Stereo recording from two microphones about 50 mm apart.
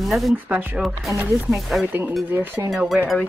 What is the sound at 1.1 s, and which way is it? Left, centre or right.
Speech, right.